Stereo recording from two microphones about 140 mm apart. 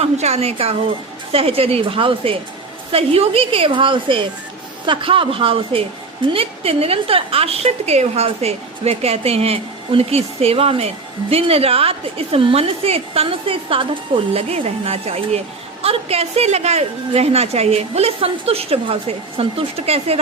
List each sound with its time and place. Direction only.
0.0 s a woman's voice: 50° right (ahead or behind)